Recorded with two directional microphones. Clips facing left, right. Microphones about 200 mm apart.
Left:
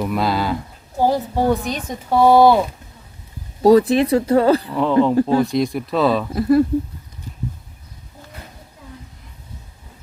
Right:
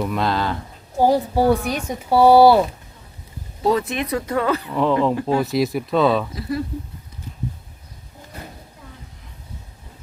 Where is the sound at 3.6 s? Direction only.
35° left (ahead or behind).